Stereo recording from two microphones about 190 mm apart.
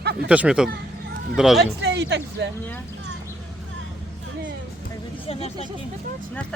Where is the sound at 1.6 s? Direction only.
65° right (ahead or behind).